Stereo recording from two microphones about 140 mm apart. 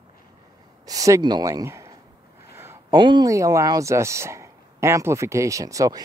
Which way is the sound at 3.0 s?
30° right (ahead or behind).